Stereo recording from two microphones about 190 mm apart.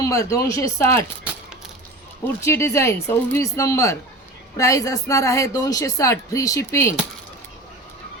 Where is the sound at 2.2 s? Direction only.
15° left (ahead or behind).